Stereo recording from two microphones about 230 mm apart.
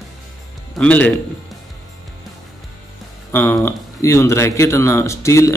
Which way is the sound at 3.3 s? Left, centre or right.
Centre.